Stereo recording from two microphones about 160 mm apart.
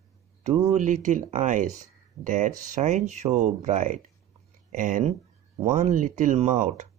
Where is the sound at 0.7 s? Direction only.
50° right (ahead or behind).